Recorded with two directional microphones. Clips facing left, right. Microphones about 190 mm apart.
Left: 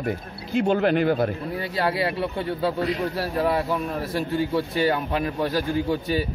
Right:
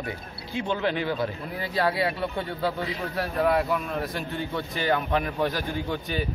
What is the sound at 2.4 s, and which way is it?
A man's voice, 25° left (ahead or behind).